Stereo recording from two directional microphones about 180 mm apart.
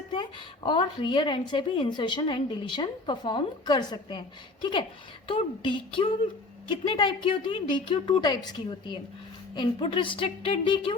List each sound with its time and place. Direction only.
0.1 s a woman's voice: 25° left (ahead or behind)
5.3 s a woman's voice: 30° left (ahead or behind)